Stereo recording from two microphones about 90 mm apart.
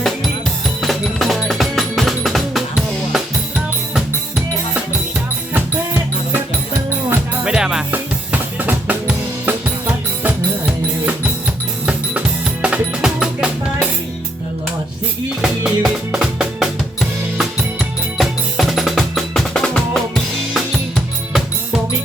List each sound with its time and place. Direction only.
0.8 s drum: centre (ahead or behind)
1.5 s music: centre (ahead or behind)
5.5 s music: 20° right (ahead or behind)
7.4 s music: 10° right (ahead or behind)
7.9 s drum kit: 20° right (ahead or behind)
12.6 s music: 10° right (ahead or behind)
15.4 s music: 5° right (ahead or behind)